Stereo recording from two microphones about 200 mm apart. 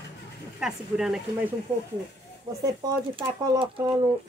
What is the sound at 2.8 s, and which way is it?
Speech, 25° right (ahead or behind).